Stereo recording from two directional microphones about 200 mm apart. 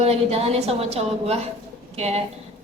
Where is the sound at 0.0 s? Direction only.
30° right (ahead or behind).